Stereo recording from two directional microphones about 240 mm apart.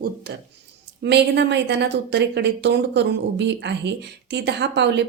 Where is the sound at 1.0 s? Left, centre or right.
Right.